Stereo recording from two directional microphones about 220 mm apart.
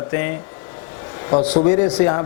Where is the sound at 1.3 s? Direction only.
25° left (ahead or behind).